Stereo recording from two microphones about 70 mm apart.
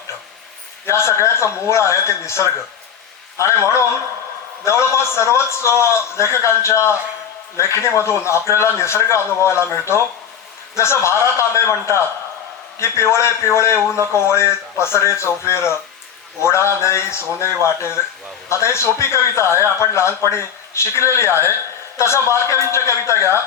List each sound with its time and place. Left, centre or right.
0.9 s a man's voice: left